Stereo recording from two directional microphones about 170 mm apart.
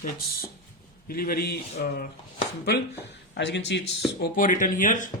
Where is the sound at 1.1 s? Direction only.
60° left (ahead or behind).